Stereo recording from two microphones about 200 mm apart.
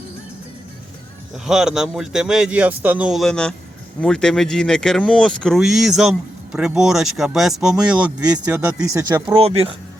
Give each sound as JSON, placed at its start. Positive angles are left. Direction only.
{"t": 1.5, "sound": "speech", "side_deg": -5}
{"t": 9.4, "sound": "speech", "side_deg": -30}